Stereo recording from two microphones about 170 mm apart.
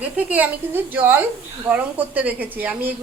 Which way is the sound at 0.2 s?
10° right (ahead or behind).